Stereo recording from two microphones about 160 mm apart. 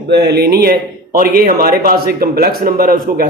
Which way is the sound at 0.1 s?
90° right.